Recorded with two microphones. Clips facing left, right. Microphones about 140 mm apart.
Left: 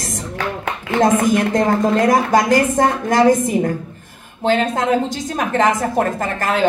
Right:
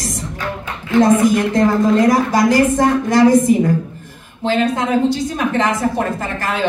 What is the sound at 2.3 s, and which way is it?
A woman's voice, 50° left (ahead or behind).